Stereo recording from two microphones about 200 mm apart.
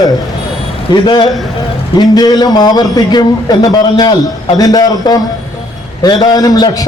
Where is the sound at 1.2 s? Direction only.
Centre (ahead or behind).